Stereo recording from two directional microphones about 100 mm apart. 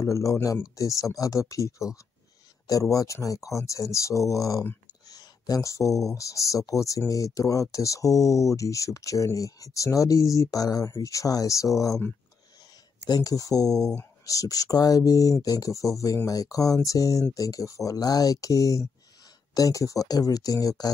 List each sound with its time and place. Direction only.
0.0 s speech: 30° left (ahead or behind)
5.0 s a sound: 40° left (ahead or behind)
6.1 s speech: 30° left (ahead or behind)